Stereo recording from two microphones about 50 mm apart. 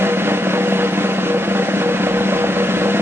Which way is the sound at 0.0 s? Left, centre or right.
Right.